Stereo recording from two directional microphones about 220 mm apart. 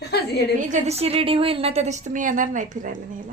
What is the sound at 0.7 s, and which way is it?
A woman's voice, 30° right (ahead or behind).